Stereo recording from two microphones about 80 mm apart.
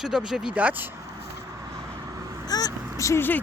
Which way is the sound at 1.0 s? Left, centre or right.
Right.